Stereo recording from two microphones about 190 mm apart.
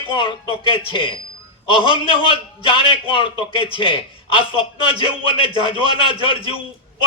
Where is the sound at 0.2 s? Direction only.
25° left (ahead or behind).